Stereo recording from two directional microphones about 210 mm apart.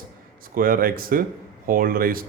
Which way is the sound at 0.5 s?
40° right (ahead or behind).